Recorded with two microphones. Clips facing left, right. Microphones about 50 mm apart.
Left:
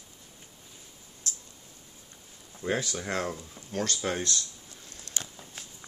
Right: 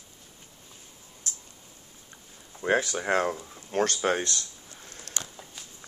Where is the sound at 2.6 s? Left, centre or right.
Right.